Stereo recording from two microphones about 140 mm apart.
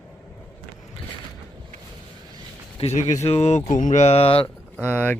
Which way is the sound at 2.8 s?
55° left (ahead or behind).